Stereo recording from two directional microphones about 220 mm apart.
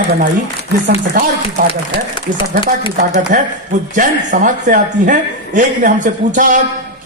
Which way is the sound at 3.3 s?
35° right (ahead or behind).